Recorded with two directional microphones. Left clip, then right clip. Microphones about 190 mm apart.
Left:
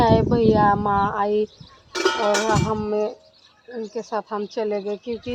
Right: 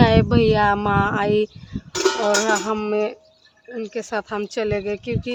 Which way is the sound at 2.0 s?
60° right (ahead or behind).